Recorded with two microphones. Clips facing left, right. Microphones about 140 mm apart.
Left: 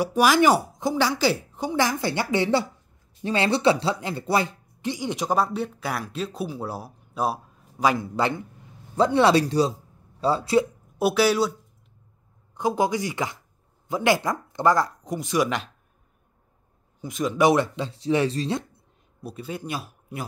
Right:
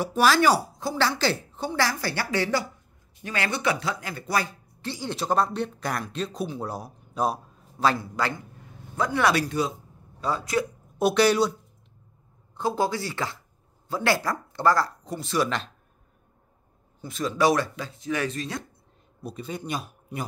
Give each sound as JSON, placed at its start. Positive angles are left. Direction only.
{"t": 0.0, "sound": "a woman's voice", "side_deg": 15}
{"t": 11.0, "sound": "speech", "side_deg": 5}
{"t": 12.5, "sound": "speech", "side_deg": 15}
{"t": 17.0, "sound": "a woman's voice", "side_deg": 15}
{"t": 19.2, "sound": "speech", "side_deg": 5}